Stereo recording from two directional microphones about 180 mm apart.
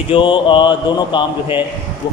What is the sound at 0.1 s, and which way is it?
Speech, 25° left (ahead or behind).